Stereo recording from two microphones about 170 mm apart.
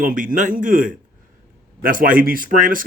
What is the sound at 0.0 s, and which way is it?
Speech, 50° right (ahead or behind).